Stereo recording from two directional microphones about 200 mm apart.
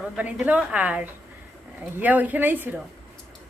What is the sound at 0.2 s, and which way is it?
Speech, 5° right (ahead or behind).